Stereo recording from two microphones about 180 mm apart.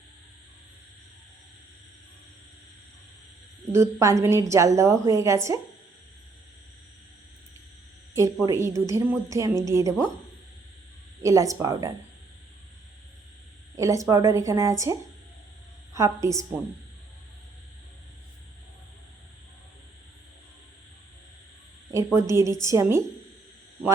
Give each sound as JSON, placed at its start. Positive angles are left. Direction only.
{"t": 3.7, "sound": "a woman's voice", "side_deg": -15}
{"t": 8.4, "sound": "a woman's voice", "side_deg": -15}
{"t": 11.2, "sound": "a woman's voice", "side_deg": -20}
{"t": 13.7, "sound": "a woman's voice", "side_deg": -20}
{"t": 16.0, "sound": "a woman's voice", "side_deg": -15}
{"t": 21.9, "sound": "a woman's voice", "side_deg": -15}